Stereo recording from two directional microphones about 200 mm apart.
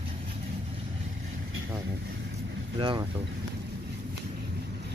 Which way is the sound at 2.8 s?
25° right (ahead or behind).